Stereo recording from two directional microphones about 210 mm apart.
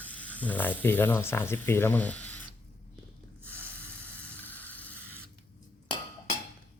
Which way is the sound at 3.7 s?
5° left (ahead or behind).